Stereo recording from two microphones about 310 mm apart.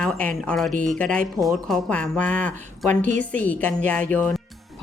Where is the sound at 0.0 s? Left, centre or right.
Centre.